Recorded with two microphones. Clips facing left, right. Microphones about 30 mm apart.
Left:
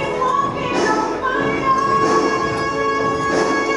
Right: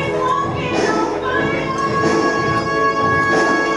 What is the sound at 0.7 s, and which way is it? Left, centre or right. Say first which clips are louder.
Music: right 1 dB; centre.